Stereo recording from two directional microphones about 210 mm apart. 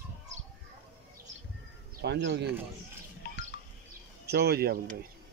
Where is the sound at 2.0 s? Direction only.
55° right (ahead or behind).